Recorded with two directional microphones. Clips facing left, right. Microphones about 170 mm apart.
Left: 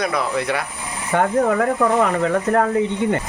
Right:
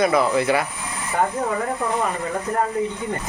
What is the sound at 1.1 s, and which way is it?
Speech, 80° left.